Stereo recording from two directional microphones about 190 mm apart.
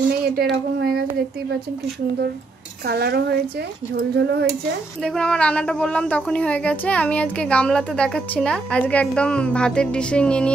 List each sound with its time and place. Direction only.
0.2 s a woman's voice: 55° right (ahead or behind)
2.9 s a woman's voice: 60° right (ahead or behind)
5.0 s speech: 5° left (ahead or behind)